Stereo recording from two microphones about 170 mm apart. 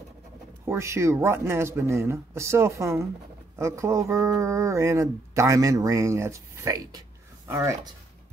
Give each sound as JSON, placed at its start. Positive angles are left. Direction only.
{"t": 0.7, "sound": "speech", "side_deg": -15}